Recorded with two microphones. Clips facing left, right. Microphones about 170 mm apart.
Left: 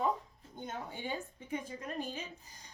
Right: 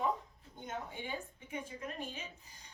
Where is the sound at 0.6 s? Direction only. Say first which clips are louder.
Left 2 dB; 35° left (ahead or behind).